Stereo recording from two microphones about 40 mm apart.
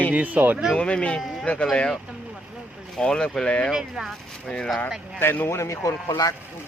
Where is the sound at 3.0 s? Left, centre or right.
Centre.